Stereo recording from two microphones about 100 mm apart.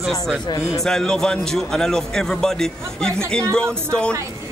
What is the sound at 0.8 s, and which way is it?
A man's voice, 5° left (ahead or behind).